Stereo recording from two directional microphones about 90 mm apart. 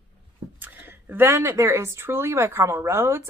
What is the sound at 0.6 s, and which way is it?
A woman's voice, 20° right (ahead or behind).